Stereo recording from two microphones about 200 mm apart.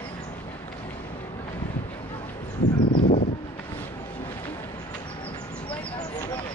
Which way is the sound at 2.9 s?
45° left (ahead or behind).